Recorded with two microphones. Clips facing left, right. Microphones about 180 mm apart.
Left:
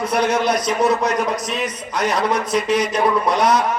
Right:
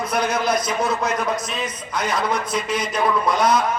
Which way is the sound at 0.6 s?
40° left (ahead or behind).